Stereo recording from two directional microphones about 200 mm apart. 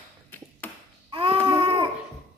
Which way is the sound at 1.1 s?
25° right (ahead or behind).